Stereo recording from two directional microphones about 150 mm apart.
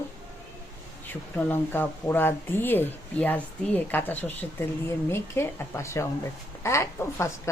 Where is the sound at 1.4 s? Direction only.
15° left (ahead or behind).